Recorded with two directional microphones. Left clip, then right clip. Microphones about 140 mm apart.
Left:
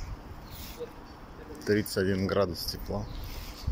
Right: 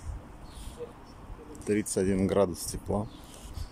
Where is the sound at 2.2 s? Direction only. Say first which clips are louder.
Right 1 dB; 45° right (ahead or behind).